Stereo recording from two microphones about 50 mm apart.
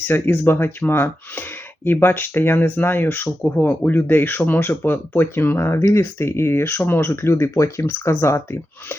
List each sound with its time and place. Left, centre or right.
0.0 s speech: left
5.1 s speech: left
7.2 s speech: left